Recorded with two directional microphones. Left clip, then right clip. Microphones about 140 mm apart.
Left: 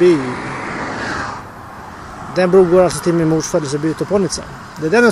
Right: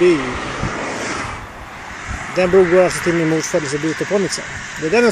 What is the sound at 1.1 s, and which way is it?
Vehicle, 20° left (ahead or behind).